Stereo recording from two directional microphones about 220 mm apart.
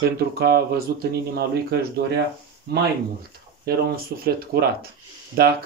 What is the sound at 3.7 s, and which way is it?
Speech, 45° right (ahead or behind).